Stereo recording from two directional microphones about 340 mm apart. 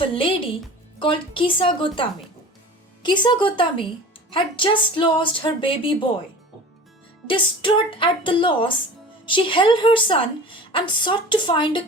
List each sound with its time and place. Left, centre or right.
0.0 s speech: centre
7.3 s speech: centre